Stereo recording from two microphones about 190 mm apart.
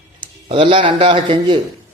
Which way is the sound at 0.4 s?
30° right (ahead or behind).